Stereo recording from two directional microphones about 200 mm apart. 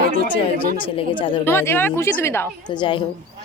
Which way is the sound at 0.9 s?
25° left (ahead or behind).